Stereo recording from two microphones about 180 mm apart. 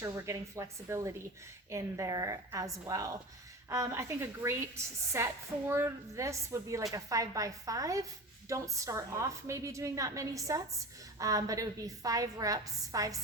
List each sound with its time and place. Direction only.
0.0 s a woman's voice: 15° right (ahead or behind)